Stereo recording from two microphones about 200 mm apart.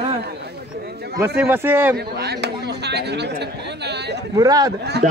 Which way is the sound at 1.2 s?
10° right (ahead or behind).